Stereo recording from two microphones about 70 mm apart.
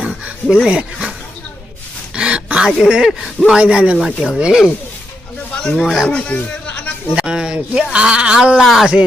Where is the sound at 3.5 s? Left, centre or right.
Centre.